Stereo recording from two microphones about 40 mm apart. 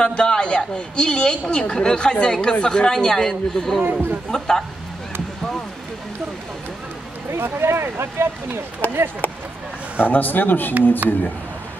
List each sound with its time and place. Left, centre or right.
0.0 s a sound: left
0.7 s speech: left
7.3 s speech: right
8.8 s speech: left
11.0 s speech: right